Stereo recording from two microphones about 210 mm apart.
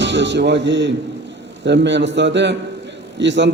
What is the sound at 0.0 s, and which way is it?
A man's voice, 55° right (ahead or behind).